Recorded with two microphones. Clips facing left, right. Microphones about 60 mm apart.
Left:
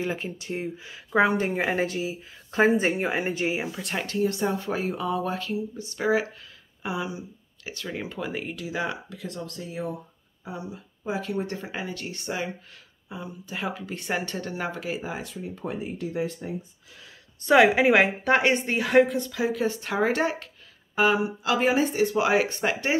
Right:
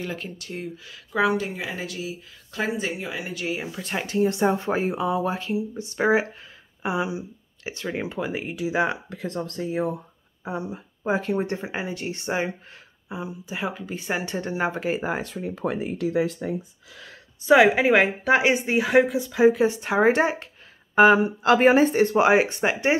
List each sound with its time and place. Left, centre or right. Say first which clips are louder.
0.0 s speech: left 2 dB; left
2.0 s speech: left 3 dB; left
3.7 s speech: right 2 dB; centre
4.0 s speech: right 4 dB; centre
5.9 s speech: right 3 dB; right; by 8.7 s centre
8.7 s speech: right 6 dB; right
13.1 s speech: right 3 dB; centre
14.2 s speech: right 5 dB; centre
15.0 s speech: right 6 dB; right
15.5 s speech: right 5 dB; right
17.4 s speech: right 2 dB; centre
19.3 s speech: right 11 dB; right
20.9 s speech: right 7 dB; right; by 22.9 s centre